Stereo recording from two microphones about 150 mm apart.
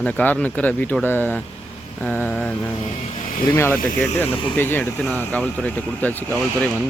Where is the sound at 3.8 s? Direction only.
65° left (ahead or behind).